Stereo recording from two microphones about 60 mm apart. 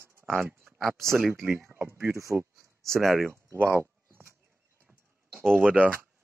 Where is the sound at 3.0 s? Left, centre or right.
Centre.